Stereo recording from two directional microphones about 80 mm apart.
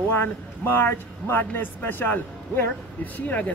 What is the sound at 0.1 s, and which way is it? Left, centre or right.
Speech, left.